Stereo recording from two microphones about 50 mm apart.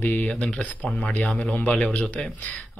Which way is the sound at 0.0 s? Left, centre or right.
Left.